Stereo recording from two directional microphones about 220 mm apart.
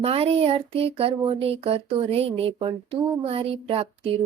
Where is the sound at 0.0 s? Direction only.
25° right (ahead or behind).